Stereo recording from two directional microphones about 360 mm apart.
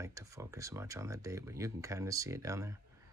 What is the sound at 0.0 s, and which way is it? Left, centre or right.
Speech, centre.